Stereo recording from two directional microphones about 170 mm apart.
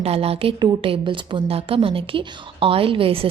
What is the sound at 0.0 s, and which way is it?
A woman's voice, 35° right (ahead or behind).